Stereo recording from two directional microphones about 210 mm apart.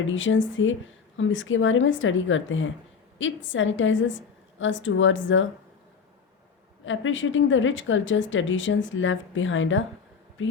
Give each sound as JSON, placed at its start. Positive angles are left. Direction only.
{"t": 0.0, "sound": "a woman's voice", "side_deg": 65}
{"t": 6.8, "sound": "a woman's voice", "side_deg": 65}